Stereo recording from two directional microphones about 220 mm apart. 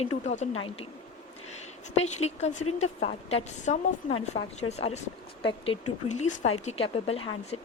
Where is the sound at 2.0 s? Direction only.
30° left (ahead or behind).